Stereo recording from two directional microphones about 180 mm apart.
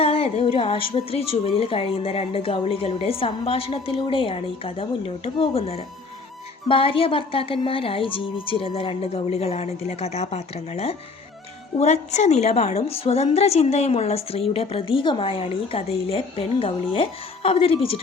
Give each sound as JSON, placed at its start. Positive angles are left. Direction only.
{"t": 0.0, "sound": "a woman's voice", "side_deg": 30}